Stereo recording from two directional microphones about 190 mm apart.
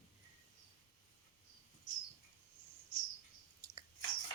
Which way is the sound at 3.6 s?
15° right (ahead or behind).